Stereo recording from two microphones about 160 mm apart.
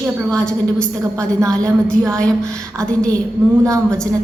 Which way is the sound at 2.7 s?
20° right (ahead or behind).